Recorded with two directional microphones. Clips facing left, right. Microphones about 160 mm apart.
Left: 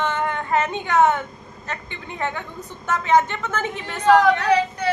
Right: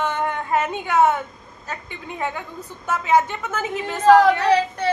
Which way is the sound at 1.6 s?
10° right (ahead or behind).